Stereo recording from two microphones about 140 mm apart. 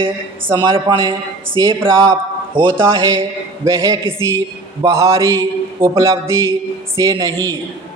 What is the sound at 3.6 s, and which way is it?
Speech, 25° right (ahead or behind).